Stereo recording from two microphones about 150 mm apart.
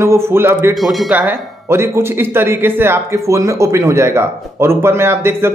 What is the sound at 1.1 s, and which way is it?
Speech, 10° right (ahead or behind).